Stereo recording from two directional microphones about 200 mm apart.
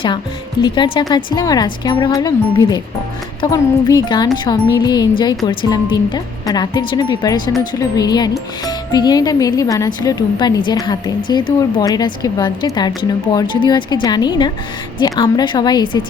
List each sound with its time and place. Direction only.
0.6 s speech: 25° left (ahead or behind)